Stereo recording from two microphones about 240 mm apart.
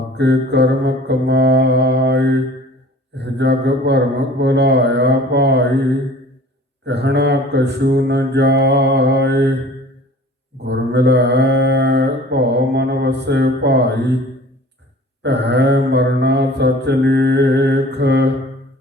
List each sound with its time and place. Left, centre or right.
0.2 s mantra: right
6.8 s mantra: right
10.6 s mantra: right
15.2 s mantra: right